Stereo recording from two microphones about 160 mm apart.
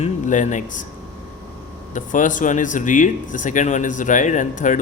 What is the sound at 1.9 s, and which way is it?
Speech, 50° left (ahead or behind).